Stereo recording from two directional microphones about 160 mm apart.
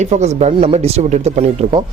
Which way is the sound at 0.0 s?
45° right (ahead or behind).